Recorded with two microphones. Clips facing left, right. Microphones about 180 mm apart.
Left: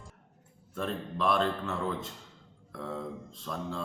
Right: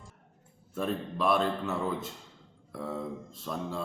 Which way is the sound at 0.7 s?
5° right (ahead or behind).